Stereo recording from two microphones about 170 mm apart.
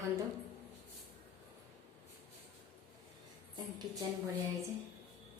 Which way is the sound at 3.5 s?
25° right (ahead or behind).